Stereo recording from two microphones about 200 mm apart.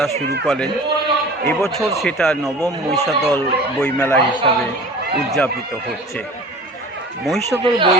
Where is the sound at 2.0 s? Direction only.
5° left (ahead or behind).